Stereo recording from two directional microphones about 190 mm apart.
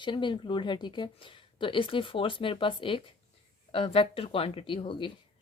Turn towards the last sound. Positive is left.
turn(degrees=25)  # may be behind; listen again after turning